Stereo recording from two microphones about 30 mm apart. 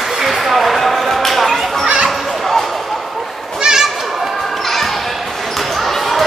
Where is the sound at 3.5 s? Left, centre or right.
Right.